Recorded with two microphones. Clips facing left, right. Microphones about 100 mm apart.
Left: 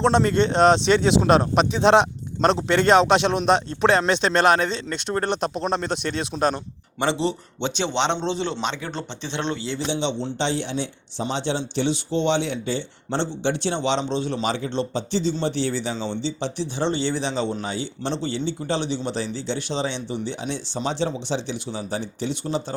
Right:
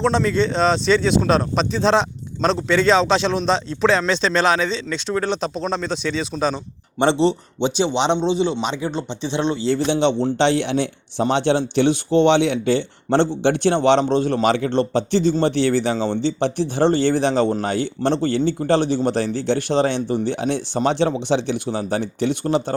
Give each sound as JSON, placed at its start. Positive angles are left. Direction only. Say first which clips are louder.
{"t": 0.6, "sound": "speech", "louder": "left 5 dB", "side_deg": 70}
{"t": 0.9, "sound": "speech", "louder": "even", "side_deg": 15}
{"t": 4.6, "sound": "speech", "louder": "right 2 dB", "side_deg": 55}
{"t": 5.4, "sound": "speech", "louder": "right 1 dB", "side_deg": 15}
{"t": 5.9, "sound": "speech", "louder": "right 3 dB", "side_deg": 60}
{"t": 6.3, "sound": "speech", "louder": "left 1 dB", "side_deg": 15}
{"t": 7.0, "sound": "speech", "louder": "right 6 dB", "side_deg": -30}
{"t": 7.9, "sound": "speech", "louder": "right 2 dB", "side_deg": -15}
{"t": 9.6, "sound": "a man's voice", "louder": "right 7 dB", "side_deg": -50}